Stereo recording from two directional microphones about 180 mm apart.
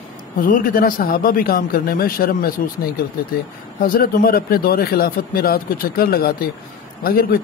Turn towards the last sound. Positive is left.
turn(degrees=55)  # may be behind; listen again after turning